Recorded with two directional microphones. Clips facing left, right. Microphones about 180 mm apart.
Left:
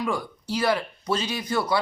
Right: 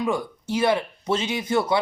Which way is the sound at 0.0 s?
25° right (ahead or behind).